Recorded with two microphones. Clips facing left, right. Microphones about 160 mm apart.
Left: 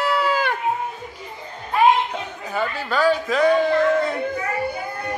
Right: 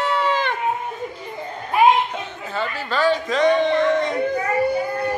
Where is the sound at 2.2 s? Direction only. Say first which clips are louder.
Left 1 dB; 10° left (ahead or behind).